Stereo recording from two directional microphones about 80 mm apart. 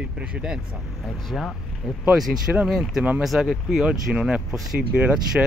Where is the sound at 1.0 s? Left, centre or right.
Centre.